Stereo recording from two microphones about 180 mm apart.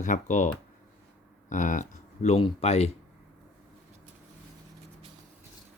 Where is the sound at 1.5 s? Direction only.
45° left (ahead or behind).